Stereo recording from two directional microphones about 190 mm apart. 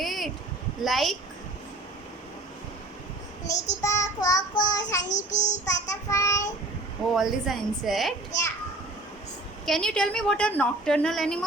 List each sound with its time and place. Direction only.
0.0 s a sound: centre (ahead or behind)
0.8 s a woman's voice: centre (ahead or behind)
3.4 s child singing: 40° left (ahead or behind)
3.8 s child singing: 15° left (ahead or behind)
5.0 s child singing: 40° left (ahead or behind)
5.6 s child singing: 15° left (ahead or behind)
7.1 s a woman's voice: centre (ahead or behind)
9.6 s a woman's voice: 5° left (ahead or behind)